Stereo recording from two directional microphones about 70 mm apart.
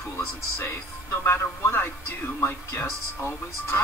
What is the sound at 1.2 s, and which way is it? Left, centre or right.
Speech, left.